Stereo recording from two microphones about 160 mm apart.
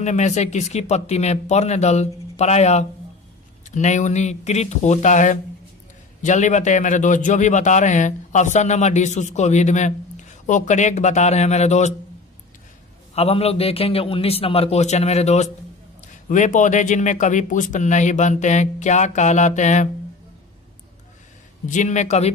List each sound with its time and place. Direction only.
0.0 s a man's voice: 45° left (ahead or behind)
13.1 s a man's voice: 40° left (ahead or behind)
21.6 s a man's voice: 50° left (ahead or behind)